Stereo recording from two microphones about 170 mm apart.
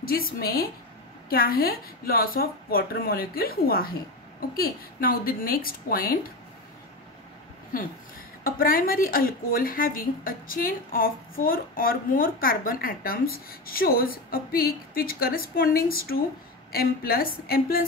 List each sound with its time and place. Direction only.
0.0 s speech: 60° left (ahead or behind)
8.5 s speech: 55° left (ahead or behind)